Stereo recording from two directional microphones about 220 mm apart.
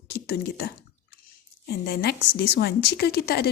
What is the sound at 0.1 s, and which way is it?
Speech, 45° left (ahead or behind).